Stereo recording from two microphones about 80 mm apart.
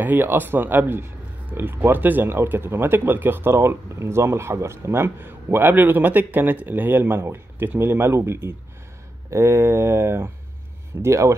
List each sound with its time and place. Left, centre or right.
0.0 s speech: right